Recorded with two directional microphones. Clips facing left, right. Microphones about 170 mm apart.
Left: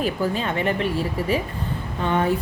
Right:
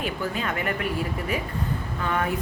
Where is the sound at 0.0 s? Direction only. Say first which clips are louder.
Left 5 dB; 35° left (ahead or behind).